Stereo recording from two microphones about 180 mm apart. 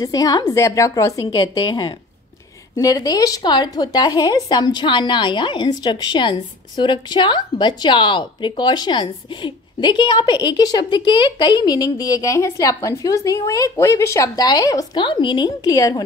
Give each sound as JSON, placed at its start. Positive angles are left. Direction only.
{"t": 0.0, "sound": "a woman's voice", "side_deg": 20}